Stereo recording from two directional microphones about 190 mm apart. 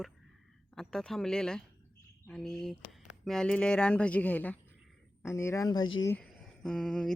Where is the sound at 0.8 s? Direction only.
Centre (ahead or behind); by 5.9 s 20° left (ahead or behind).